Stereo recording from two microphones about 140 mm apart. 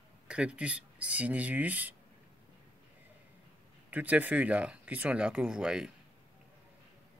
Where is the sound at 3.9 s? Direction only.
10° right (ahead or behind).